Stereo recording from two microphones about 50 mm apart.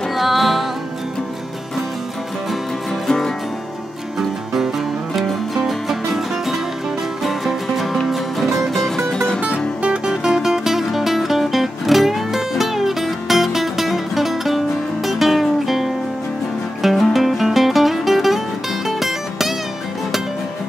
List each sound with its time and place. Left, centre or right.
0.1 s music: centre
5.1 s music: centre
10.0 s music: centre